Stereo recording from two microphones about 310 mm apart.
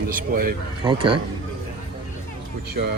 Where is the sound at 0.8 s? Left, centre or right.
Centre.